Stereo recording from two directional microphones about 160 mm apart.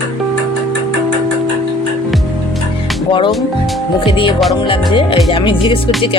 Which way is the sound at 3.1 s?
30° left (ahead or behind).